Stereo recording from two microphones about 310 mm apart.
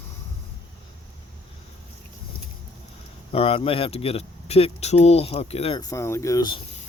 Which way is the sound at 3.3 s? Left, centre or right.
Centre.